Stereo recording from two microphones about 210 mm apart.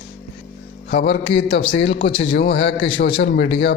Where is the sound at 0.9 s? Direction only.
55° left (ahead or behind).